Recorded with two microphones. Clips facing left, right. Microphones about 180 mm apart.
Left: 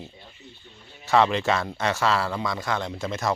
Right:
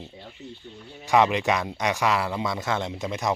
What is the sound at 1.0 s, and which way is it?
Speech, 15° right (ahead or behind).